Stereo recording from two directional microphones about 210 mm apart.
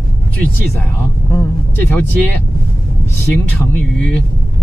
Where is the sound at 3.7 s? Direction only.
5° left (ahead or behind).